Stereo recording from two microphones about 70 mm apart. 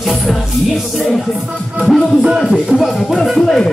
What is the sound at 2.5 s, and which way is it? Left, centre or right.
Music, centre.